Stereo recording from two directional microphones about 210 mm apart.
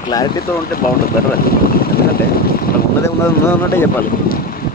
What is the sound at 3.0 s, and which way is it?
Speech, 10° left (ahead or behind).